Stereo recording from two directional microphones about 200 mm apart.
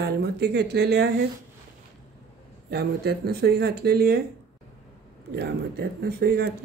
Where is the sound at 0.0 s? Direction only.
55° right (ahead or behind).